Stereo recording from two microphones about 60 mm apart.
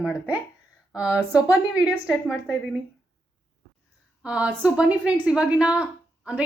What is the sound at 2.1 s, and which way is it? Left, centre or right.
Speech, centre.